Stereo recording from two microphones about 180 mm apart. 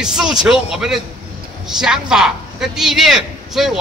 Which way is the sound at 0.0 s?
5° right (ahead or behind).